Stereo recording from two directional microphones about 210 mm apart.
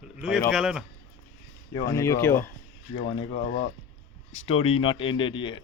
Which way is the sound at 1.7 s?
15° left (ahead or behind).